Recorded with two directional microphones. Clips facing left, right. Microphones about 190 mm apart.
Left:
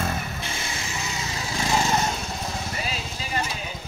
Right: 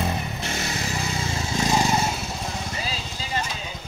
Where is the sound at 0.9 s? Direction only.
35° right (ahead or behind).